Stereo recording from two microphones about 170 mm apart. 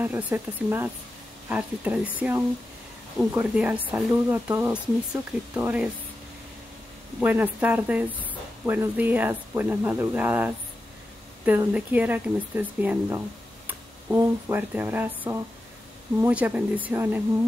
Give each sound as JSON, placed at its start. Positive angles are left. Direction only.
{"t": 0.0, "sound": "speech", "side_deg": -10}
{"t": 7.2, "sound": "speech", "side_deg": -10}
{"t": 8.2, "sound": "a sound", "side_deg": -10}
{"t": 8.9, "sound": "speech", "side_deg": -10}